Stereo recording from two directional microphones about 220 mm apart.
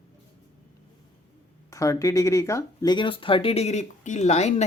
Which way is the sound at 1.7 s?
15° left (ahead or behind).